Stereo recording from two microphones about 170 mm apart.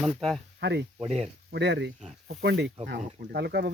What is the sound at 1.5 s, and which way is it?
Speech, 90° right.